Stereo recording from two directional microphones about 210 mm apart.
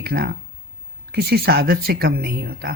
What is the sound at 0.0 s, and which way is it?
Speech, 50° right (ahead or behind).